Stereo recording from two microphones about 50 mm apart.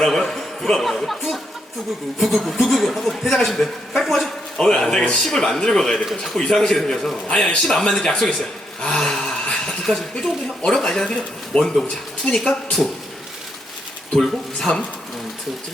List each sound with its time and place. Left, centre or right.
0.0 s a man's voice: centre
4.6 s a man's voice: centre
14.2 s a man's voice: centre